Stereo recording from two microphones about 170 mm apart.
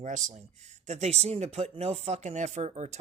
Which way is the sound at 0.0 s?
45° right (ahead or behind).